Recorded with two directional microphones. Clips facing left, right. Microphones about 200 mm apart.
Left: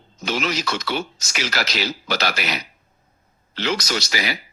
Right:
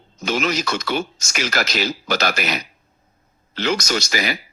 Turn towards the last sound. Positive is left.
turn(degrees=-50)  # may be behind; listen again after turning